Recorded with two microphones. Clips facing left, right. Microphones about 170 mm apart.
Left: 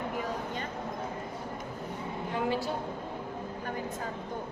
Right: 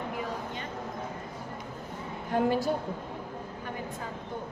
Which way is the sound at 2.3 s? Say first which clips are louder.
Right 5 dB; 50° right (ahead or behind).